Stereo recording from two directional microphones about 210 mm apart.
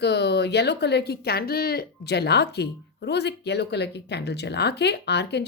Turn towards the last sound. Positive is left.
turn(degrees=55)  # may be behind; listen again after turning